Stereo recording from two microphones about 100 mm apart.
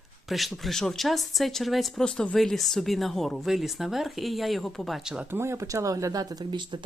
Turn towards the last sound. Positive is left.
turn(degrees=-50)  # may be behind; listen again after turning